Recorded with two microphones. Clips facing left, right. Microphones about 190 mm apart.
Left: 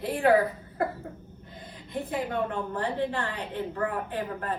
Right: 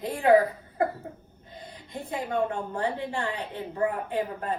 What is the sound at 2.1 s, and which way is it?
A woman's voice, 15° right (ahead or behind).